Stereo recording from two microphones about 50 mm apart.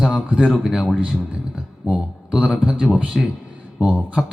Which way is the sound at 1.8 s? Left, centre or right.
Right.